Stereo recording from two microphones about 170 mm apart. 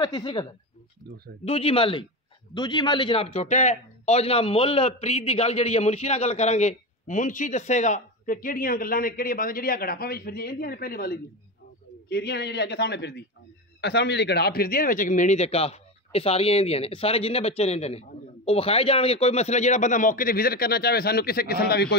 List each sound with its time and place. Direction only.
0.0 s a woman's voice: 25° left (ahead or behind); by 11.1 s 60° left (ahead or behind)
12.1 s a man's voice: 75° left (ahead or behind)